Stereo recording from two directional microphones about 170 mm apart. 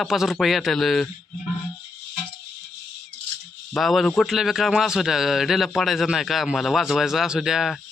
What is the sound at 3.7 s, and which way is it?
A man's voice, centre (ahead or behind).